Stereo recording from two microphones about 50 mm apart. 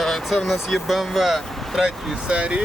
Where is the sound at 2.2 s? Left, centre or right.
Right.